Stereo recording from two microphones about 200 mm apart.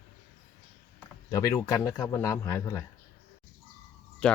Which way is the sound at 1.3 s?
15° left (ahead or behind).